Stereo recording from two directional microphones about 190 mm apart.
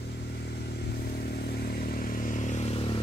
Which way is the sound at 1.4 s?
55° left (ahead or behind).